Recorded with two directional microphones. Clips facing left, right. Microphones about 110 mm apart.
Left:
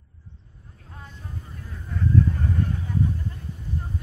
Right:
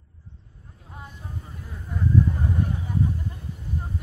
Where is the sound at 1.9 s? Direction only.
15° right (ahead or behind).